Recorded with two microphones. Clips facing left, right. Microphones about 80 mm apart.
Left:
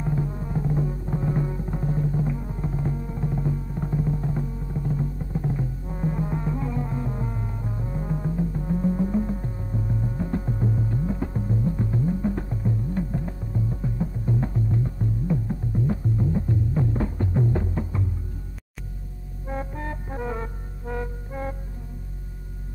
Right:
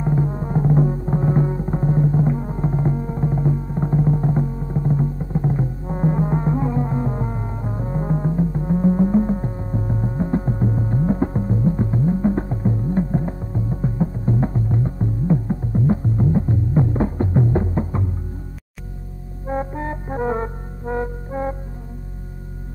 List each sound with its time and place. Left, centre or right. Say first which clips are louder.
0.0 s music: right 6 dB; right
19.4 s music: right 7 dB; right